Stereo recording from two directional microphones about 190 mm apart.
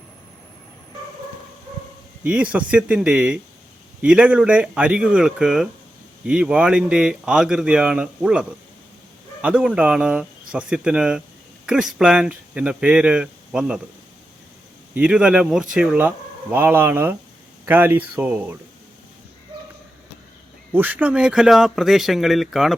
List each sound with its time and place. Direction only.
2.2 s speech: 5° right (ahead or behind)
14.9 s speech: 5° right (ahead or behind)
20.7 s speech: 10° right (ahead or behind)